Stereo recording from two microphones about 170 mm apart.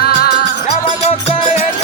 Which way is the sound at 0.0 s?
65° left (ahead or behind).